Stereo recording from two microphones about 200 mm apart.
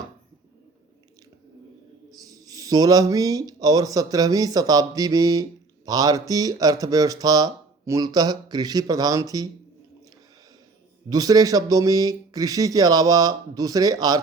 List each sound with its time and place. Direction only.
2.0 s speech: 20° right (ahead or behind)
11.1 s speech: 20° right (ahead or behind)